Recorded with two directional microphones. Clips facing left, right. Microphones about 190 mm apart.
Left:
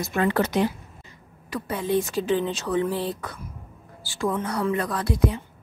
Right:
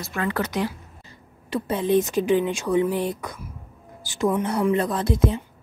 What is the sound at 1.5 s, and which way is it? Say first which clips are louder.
Speech: right 4 dB; 20° right (ahead or behind).